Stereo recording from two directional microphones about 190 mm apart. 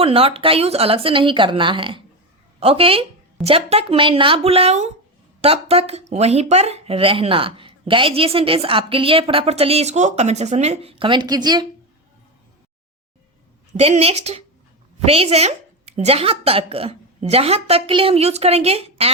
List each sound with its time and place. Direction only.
0.0 s speech: 30° right (ahead or behind)
13.7 s speech: 35° right (ahead or behind)